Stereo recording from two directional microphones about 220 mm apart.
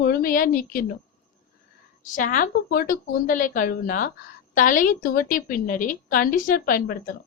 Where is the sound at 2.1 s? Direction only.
35° left (ahead or behind).